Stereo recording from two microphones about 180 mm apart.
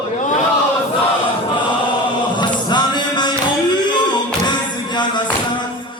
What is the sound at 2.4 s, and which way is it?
Music, 25° left (ahead or behind).